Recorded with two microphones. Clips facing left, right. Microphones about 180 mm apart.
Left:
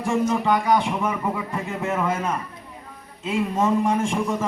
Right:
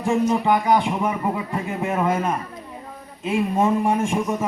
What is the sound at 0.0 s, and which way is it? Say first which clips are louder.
A woman's voice: right 2 dB; 20° right (ahead or behind).